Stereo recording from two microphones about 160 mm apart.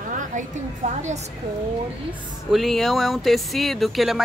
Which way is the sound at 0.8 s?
45° right (ahead or behind).